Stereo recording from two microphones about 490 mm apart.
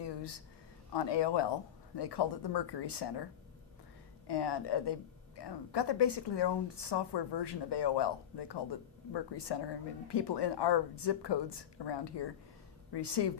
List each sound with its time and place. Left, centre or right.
0.0 s a sound: left
0.9 s a woman's voice: left
4.3 s a woman's voice: left